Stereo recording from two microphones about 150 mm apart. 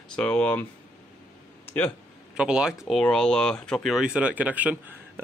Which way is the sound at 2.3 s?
5° right (ahead or behind).